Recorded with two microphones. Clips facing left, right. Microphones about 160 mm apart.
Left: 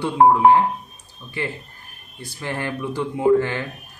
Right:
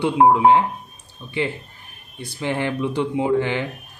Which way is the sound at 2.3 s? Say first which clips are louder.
Right 4 dB; 20° right (ahead or behind).